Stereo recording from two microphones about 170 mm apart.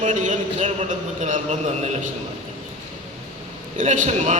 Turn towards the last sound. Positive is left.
turn(degrees=-45)  # may be behind; listen again after turning